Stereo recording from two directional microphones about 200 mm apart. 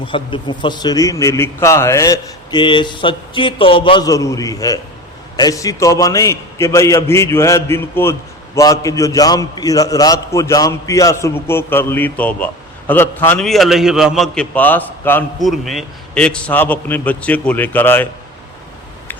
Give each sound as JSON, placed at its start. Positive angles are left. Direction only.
{"t": 0.0, "sound": "a man's voice", "side_deg": 25}